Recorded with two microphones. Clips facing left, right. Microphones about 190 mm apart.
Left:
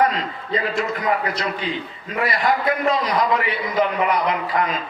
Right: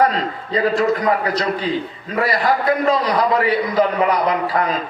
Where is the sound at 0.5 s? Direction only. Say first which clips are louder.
Right 6 dB; 40° right (ahead or behind).